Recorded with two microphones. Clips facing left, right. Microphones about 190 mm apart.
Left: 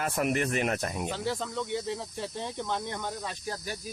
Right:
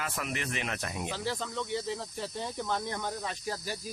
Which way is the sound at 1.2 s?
5° left (ahead or behind).